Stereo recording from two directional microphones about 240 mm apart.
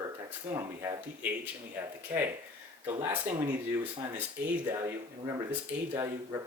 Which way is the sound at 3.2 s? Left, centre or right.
Right.